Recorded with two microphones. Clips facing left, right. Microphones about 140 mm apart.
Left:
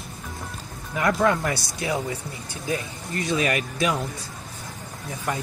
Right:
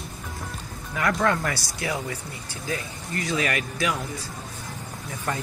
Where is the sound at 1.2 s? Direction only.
15° left (ahead or behind).